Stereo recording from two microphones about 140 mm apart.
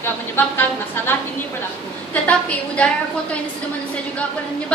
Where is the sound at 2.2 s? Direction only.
10° left (ahead or behind).